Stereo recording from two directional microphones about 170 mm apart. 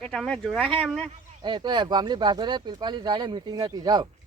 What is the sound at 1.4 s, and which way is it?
Speech, 25° right (ahead or behind).